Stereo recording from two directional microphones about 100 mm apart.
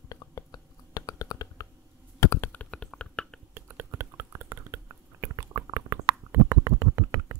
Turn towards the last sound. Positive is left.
turn(degrees=-25)  # may be behind; listen again after turning